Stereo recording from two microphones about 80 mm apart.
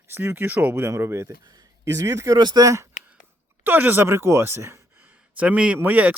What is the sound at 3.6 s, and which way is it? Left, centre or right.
Speech, right.